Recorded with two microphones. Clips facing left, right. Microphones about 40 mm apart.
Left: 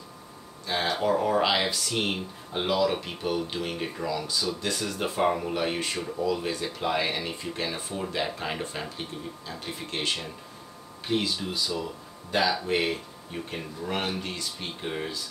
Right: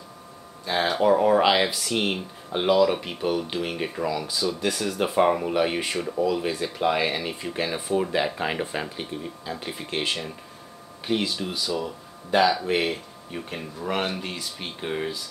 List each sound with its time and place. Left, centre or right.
0.7 s speech: centre